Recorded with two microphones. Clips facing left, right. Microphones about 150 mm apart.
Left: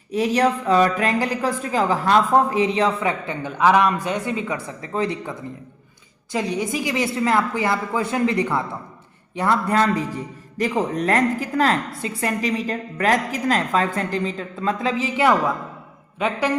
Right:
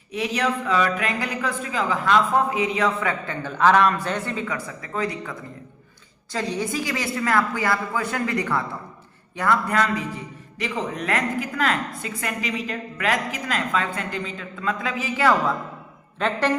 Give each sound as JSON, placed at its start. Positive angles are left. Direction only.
{"t": 0.1, "sound": "a woman's voice", "side_deg": 40}
{"t": 16.1, "sound": "speech", "side_deg": 10}